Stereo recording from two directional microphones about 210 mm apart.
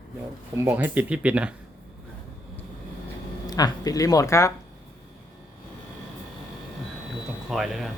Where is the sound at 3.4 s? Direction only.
20° left (ahead or behind).